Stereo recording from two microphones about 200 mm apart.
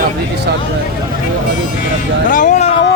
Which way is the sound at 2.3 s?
40° left (ahead or behind).